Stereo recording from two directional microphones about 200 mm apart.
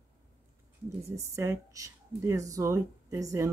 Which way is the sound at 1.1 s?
15° right (ahead or behind).